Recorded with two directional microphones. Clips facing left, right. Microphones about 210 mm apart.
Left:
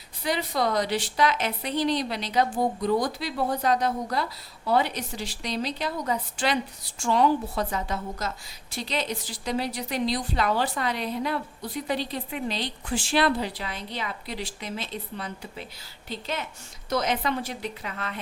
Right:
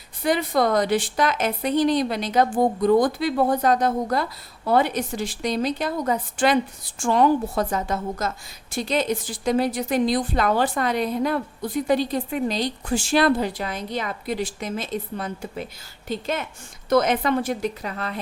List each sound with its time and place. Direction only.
0.2 s a woman's voice: 50° right (ahead or behind)